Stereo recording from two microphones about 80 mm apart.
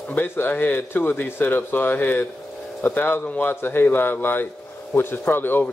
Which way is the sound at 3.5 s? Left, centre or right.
Left.